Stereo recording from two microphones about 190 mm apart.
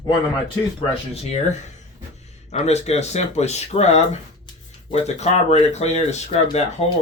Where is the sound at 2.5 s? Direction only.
35° left (ahead or behind).